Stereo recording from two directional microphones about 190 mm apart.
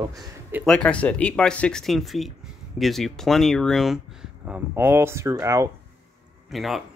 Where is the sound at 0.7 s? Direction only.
5° left (ahead or behind); by 5.7 s 15° right (ahead or behind).